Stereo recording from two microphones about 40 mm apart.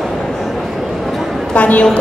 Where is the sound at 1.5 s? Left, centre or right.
Left.